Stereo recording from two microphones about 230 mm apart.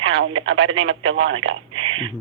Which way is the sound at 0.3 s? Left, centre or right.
Right.